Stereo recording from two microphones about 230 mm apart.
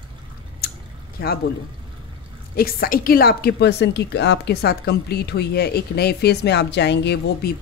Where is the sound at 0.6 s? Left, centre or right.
Left.